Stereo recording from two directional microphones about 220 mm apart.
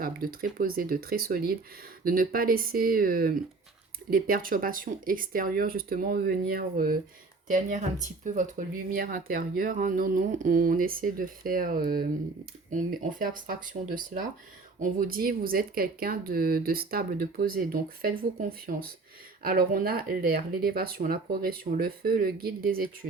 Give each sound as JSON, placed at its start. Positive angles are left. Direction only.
{"t": 0.0, "sound": "speech", "side_deg": -40}